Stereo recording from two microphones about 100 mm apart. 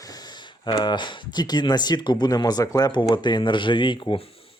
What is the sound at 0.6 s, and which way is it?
Speech, 45° left (ahead or behind).